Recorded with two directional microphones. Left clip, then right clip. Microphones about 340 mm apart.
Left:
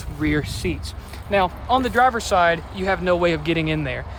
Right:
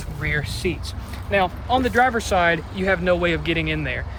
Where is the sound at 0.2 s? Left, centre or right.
Centre.